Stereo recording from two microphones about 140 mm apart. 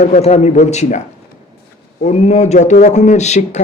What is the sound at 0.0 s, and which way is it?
A man's voice, 50° left (ahead or behind).